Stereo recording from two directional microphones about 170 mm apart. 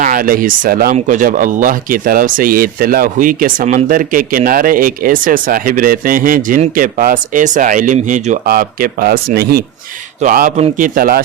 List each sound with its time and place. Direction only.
0.0 s speech: 55° right (ahead or behind)
0.9 s speech: 50° right (ahead or behind)
8.4 s speech: 60° right (ahead or behind)
10.2 s speech: 50° right (ahead or behind)